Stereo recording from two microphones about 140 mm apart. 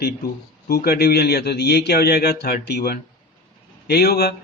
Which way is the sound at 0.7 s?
90° left.